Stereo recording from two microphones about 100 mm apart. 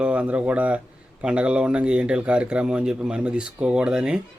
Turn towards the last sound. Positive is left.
turn(degrees=-10)  # may be behind; listen again after turning